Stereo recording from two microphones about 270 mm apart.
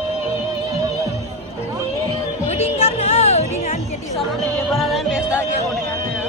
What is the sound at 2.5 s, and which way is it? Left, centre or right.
Music, left.